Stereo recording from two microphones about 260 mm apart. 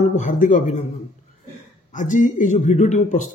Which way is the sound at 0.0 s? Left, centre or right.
Left.